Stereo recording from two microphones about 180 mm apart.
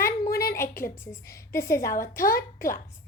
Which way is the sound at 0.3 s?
15° left (ahead or behind).